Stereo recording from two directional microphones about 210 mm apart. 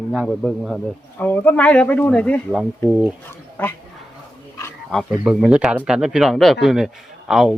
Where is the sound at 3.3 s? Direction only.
10° left (ahead or behind).